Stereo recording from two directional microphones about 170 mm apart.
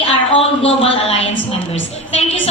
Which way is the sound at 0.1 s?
35° left (ahead or behind).